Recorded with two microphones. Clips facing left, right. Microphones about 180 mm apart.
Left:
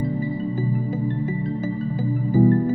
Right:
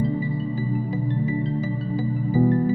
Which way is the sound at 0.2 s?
50° left (ahead or behind).